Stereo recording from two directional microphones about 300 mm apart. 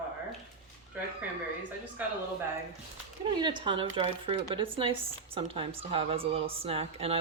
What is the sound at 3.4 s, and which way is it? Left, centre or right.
Speech, centre.